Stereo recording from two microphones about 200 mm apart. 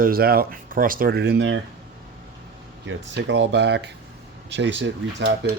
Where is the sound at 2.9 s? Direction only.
65° right (ahead or behind).